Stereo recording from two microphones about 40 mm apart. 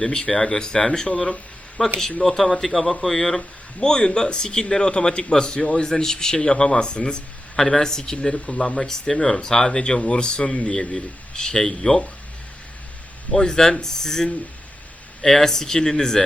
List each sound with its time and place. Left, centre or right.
0.0 s a man's voice: centre
2.2 s a man's voice: centre
3.8 s a man's voice: centre
13.3 s speech: centre